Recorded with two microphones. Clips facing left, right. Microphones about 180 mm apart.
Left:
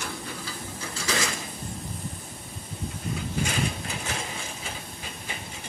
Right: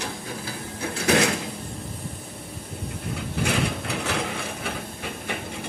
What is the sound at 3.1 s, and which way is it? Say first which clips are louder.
Mechanisms: right 4 dB; 65° right (ahead or behind).